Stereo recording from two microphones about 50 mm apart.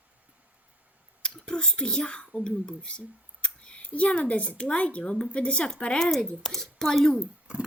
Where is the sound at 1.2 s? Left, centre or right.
Centre.